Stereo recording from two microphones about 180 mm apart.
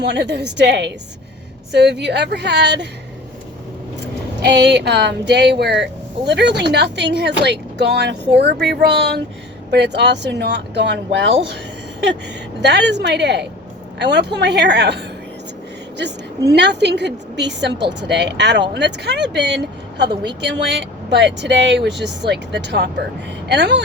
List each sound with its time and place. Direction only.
0.0 s speech: 70° right (ahead or behind)
4.4 s speech: 70° right (ahead or behind); by 11.5 s 90° right
12.6 s speech: 75° right (ahead or behind)
16.5 s speech: 70° right (ahead or behind)